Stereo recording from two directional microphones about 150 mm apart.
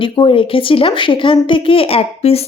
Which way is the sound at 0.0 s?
35° left (ahead or behind).